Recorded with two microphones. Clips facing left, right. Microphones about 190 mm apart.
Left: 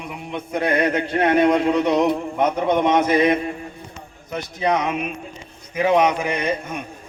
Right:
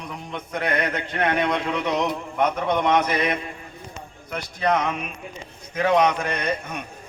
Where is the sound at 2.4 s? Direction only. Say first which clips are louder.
Even; 10° left (ahead or behind).